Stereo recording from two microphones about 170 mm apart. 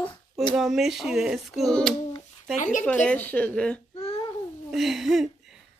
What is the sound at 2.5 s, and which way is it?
Speech, 45° left (ahead or behind).